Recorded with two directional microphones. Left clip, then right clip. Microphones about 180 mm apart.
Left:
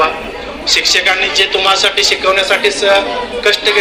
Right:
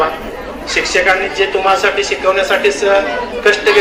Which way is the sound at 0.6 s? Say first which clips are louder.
Left 1 dB; 55° right (ahead or behind).